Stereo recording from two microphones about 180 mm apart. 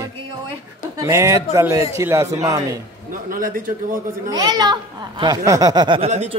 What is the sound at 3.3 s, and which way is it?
Speech, 50° right (ahead or behind).